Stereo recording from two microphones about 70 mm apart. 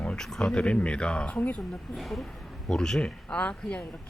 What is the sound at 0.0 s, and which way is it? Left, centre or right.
Speech, centre.